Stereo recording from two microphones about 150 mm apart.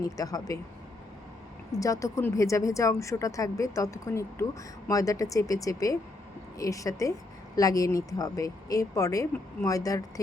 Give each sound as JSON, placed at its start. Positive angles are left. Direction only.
{"t": 0.0, "sound": "a woman's voice", "side_deg": 25}
{"t": 1.7, "sound": "a woman's voice", "side_deg": 20}